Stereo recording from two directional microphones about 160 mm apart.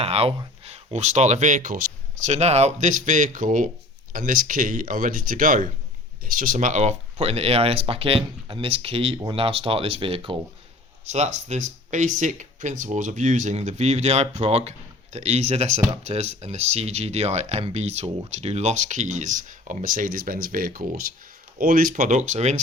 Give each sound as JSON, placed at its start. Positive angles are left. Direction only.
{"t": 0.0, "sound": "speech", "side_deg": -40}
{"t": 11.0, "sound": "speech", "side_deg": -45}